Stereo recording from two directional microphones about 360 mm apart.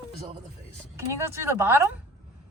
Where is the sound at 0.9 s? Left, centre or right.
Centre.